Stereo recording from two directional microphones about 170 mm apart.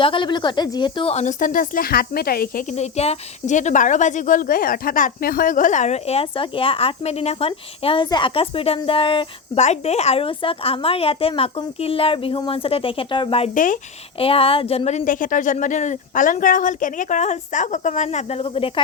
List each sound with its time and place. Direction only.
0.0 s speech: 30° left (ahead or behind)
1.1 s speech: 45° left (ahead or behind); by 2.6 s 60° left (ahead or behind)
2.7 s speech: 40° left (ahead or behind)
13.5 s speech: 50° left (ahead or behind)
14.2 s speech: 35° left (ahead or behind)